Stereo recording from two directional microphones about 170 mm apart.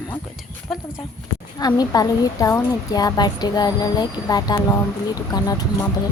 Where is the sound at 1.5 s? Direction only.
25° left (ahead or behind).